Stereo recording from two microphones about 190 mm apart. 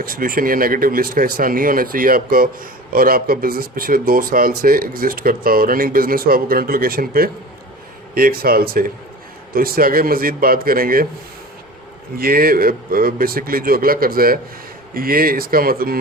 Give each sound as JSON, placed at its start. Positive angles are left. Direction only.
{"t": 0.0, "sound": "speech", "side_deg": -50}
{"t": 12.1, "sound": "speech", "side_deg": -50}